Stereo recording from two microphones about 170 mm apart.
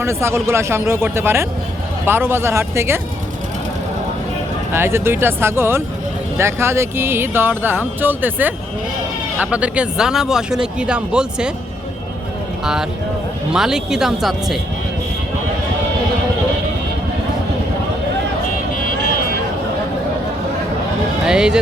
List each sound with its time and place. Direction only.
0.0 s speech: 15° right (ahead or behind)
4.7 s speech: 15° right (ahead or behind)
13.5 s speech: 5° right (ahead or behind)
21.2 s speech: 5° right (ahead or behind)